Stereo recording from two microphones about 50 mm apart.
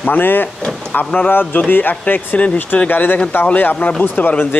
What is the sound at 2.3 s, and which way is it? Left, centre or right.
Speech, left.